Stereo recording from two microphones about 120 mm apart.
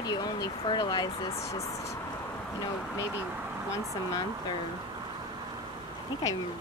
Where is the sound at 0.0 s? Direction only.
35° left (ahead or behind).